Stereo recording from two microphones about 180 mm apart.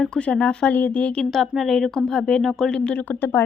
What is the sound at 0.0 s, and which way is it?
A woman's voice, 5° left (ahead or behind).